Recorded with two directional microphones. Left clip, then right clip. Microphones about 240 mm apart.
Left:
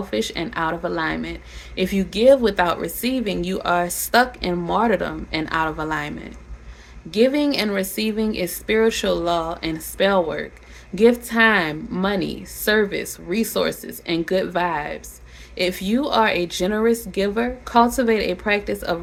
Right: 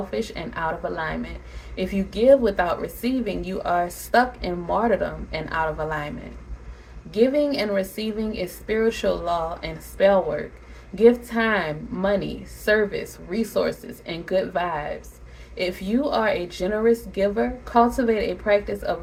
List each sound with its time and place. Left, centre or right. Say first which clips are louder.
0.1 s speech: left 4 dB; left
7.1 s speech: left 2 dB; left